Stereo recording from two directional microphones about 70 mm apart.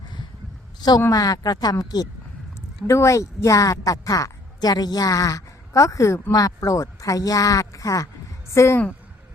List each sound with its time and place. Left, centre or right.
0.8 s a woman's voice: left
1.1 s speech: left
2.8 s speech: left
6.3 s speech: left
8.5 s speech: left